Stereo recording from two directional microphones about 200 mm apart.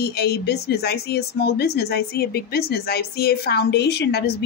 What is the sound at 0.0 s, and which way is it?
Speech, 55° left (ahead or behind).